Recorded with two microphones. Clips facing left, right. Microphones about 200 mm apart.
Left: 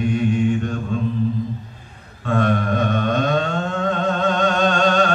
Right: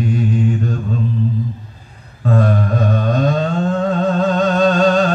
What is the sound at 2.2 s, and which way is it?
Mantra, 35° right (ahead or behind).